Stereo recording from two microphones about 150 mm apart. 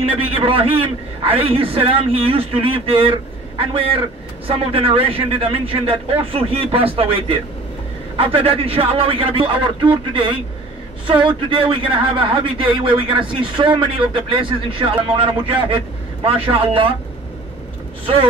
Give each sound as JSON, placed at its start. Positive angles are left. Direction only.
{"t": 0.3, "sound": "a man's voice", "side_deg": -40}